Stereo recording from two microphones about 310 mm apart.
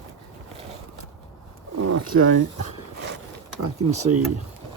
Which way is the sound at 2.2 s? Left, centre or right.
Right.